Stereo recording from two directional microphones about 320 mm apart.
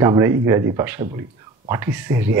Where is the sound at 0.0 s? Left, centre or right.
Centre.